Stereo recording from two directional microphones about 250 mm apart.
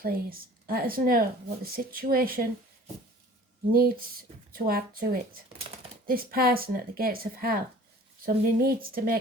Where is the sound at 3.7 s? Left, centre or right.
Right.